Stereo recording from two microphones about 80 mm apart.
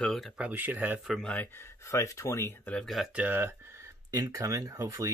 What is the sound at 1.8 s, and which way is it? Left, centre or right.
Speech, left.